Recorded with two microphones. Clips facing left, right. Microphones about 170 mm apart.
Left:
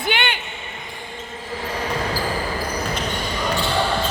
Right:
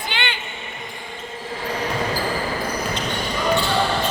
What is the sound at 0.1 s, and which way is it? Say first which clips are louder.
Basketball bounce: left 6 dB; 55° left (ahead or behind).